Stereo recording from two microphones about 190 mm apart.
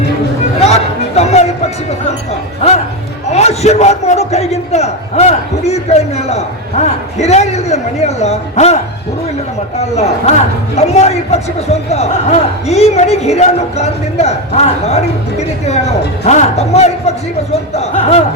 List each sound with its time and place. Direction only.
0.6 s a sound: 35° left (ahead or behind)
3.2 s a man's voice: 35° left (ahead or behind)
9.9 s a man's voice: 35° left (ahead or behind)